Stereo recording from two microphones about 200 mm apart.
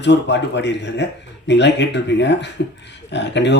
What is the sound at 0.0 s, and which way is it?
Speech, 60° left (ahead or behind).